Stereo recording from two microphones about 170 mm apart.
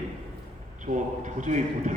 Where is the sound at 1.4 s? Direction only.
45° right (ahead or behind).